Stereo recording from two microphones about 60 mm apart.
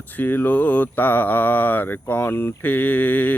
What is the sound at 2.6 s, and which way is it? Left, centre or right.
Speech, left.